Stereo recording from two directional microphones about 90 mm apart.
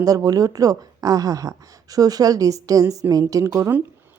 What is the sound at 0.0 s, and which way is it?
A woman's voice, 40° right (ahead or behind).